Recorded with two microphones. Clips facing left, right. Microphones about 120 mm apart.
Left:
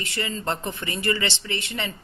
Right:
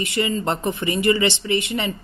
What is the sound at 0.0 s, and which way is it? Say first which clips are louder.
Speech: right 7 dB; 15° right (ahead or behind).